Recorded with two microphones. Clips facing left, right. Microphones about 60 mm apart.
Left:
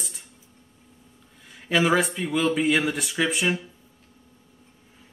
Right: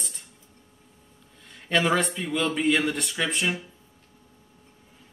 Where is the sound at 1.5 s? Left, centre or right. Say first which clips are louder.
Left 2 dB; centre.